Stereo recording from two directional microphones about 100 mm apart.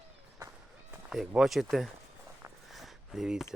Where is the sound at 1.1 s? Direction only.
Centre (ahead or behind).